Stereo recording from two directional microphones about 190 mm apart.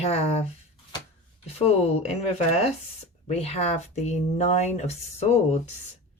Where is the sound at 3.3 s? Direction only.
35° left (ahead or behind).